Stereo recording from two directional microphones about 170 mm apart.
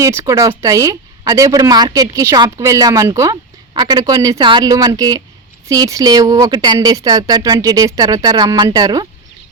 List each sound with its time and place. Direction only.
0.0 s speech: 15° right (ahead or behind)